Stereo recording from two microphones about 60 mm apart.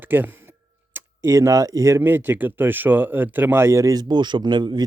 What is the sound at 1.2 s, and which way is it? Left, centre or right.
Speech, right.